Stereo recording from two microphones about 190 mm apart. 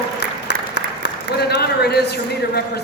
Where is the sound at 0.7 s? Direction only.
60° left (ahead or behind).